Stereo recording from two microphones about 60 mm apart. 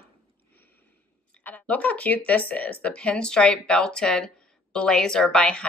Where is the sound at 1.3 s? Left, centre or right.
Left.